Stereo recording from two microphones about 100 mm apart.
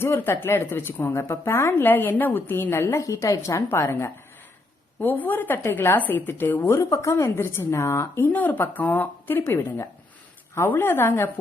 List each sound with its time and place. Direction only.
0.0 s a woman's voice: 20° left (ahead or behind)